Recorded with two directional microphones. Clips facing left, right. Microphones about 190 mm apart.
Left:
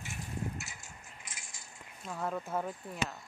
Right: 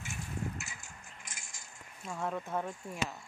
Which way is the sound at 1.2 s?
45° right (ahead or behind).